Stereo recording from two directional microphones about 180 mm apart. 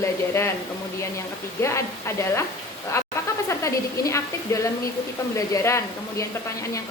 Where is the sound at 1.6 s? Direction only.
15° left (ahead or behind).